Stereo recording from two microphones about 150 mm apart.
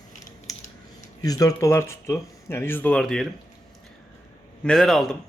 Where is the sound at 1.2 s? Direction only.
25° left (ahead or behind); by 3.3 s 5° left (ahead or behind).